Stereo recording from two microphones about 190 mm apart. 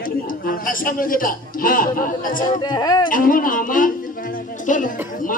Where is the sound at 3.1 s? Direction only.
45° left (ahead or behind).